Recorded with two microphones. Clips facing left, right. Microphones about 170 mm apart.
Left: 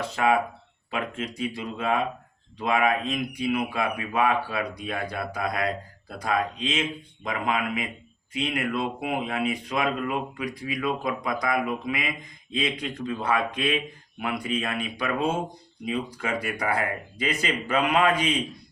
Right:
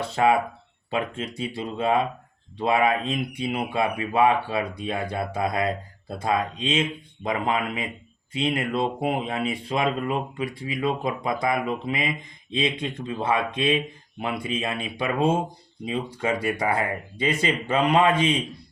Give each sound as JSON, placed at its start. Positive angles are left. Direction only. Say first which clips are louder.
{"t": 0.0, "sound": "a man's voice", "louder": "right 2 dB", "side_deg": -30}